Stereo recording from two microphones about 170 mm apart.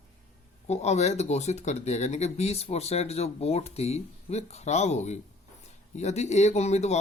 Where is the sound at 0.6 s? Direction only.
40° left (ahead or behind).